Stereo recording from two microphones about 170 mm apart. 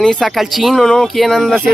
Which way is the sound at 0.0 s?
5° left (ahead or behind).